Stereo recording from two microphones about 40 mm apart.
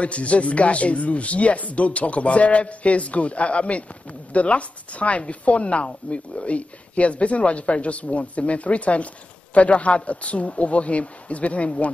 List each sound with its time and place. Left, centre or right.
0.0 s speech: left